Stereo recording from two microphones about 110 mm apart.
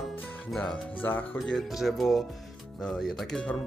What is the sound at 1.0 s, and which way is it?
Speech, 20° left (ahead or behind).